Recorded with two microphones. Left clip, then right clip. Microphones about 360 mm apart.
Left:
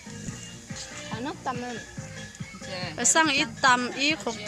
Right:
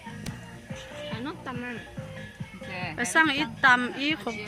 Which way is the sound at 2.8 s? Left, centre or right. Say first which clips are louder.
Even; centre.